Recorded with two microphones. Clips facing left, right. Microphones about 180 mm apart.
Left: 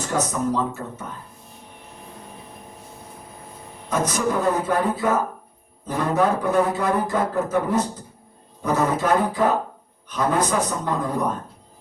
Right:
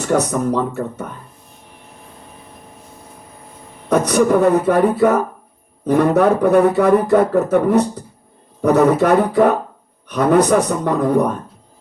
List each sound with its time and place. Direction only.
0.1 s speech: 65° right (ahead or behind)
3.8 s speech: 65° right (ahead or behind)